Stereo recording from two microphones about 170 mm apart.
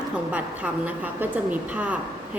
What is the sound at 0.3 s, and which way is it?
A woman's voice, 10° right (ahead or behind).